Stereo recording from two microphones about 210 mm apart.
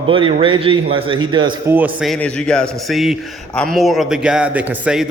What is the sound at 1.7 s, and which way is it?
A man's voice, 5° right (ahead or behind).